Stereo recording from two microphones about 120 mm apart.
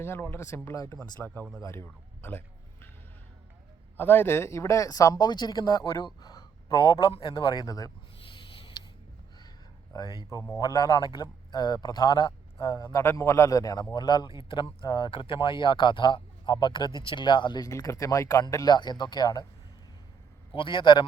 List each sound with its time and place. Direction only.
0.0 s speech: 20° left (ahead or behind)
3.9 s speech: 15° left (ahead or behind)
9.9 s speech: 35° left (ahead or behind)
20.5 s a man's voice: 45° left (ahead or behind)